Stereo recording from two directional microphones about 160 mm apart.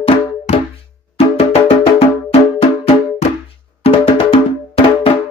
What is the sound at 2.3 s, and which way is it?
Music, 40° left (ahead or behind).